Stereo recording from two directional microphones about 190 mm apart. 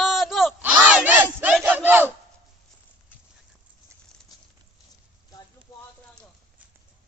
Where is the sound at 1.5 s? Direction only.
10° right (ahead or behind).